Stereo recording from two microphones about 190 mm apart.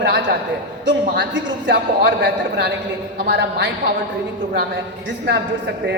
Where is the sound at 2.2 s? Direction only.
55° right (ahead or behind).